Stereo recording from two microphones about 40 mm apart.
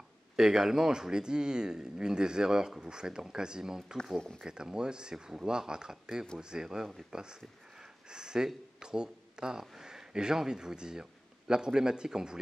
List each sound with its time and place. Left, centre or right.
0.4 s speech: centre